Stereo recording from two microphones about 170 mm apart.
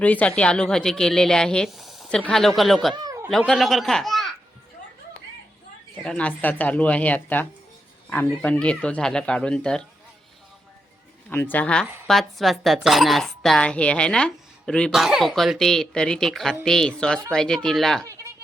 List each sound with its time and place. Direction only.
0.0 s speech: 10° left (ahead or behind)
2.9 s a sound: 20° right (ahead or behind)
3.2 s speech: centre (ahead or behind)
6.0 s speech: 5° left (ahead or behind)
11.3 s speech: 10° left (ahead or behind)
18.0 s a sound: 20° right (ahead or behind)